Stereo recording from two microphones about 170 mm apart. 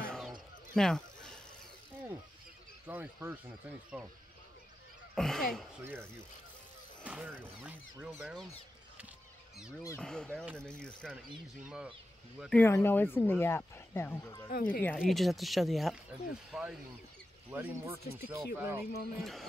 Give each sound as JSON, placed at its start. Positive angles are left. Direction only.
{"t": 0.0, "sound": "a sound", "side_deg": 5}
{"t": 0.7, "sound": "speech", "side_deg": 5}
{"t": 2.9, "sound": "speech", "side_deg": -10}
{"t": 5.1, "sound": "speech", "side_deg": 5}
{"t": 7.0, "sound": "speech", "side_deg": -10}
{"t": 9.8, "sound": "speech", "side_deg": 5}
{"t": 11.6, "sound": "speech", "side_deg": -5}
{"t": 12.5, "sound": "speech", "side_deg": 15}
{"t": 14.5, "sound": "speech", "side_deg": 55}
{"t": 15.0, "sound": "speech", "side_deg": 0}
{"t": 19.1, "sound": "speech", "side_deg": 0}